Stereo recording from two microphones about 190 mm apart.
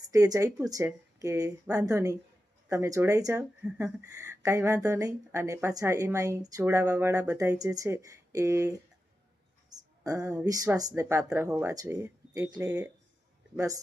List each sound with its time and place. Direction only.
0.1 s speech: 15° right (ahead or behind)